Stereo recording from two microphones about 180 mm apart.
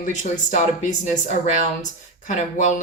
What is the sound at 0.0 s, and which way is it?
A woman's voice, 45° left (ahead or behind).